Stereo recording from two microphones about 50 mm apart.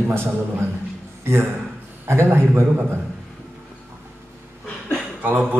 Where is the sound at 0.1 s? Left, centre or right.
Right.